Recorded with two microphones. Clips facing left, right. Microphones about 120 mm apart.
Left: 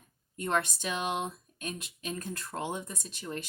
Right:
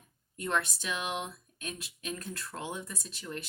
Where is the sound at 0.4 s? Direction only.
35° left (ahead or behind).